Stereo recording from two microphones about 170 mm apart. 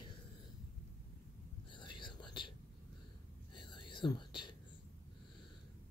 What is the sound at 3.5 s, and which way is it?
Whispering, 25° left (ahead or behind).